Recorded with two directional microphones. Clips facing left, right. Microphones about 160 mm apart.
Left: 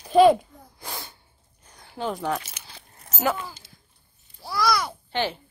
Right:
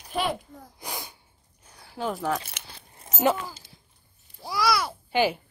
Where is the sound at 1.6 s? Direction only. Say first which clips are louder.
Left 1 dB; 5° right (ahead or behind).